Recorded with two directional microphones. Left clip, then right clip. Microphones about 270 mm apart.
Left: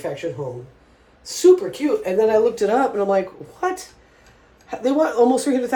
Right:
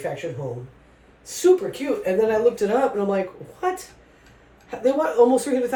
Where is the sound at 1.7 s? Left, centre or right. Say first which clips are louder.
Left 2 dB; left.